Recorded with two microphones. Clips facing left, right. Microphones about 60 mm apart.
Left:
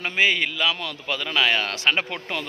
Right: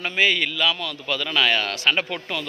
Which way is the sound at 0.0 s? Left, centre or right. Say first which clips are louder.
Even; left.